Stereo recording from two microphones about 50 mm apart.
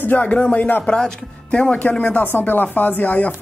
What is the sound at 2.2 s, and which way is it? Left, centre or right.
Speech, left.